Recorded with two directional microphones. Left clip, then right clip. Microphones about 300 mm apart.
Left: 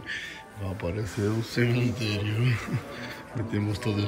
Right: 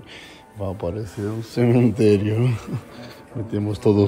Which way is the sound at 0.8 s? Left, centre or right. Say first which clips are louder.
Even; centre.